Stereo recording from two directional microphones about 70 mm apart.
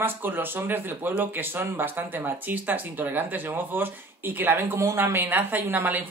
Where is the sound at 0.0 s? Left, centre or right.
Right.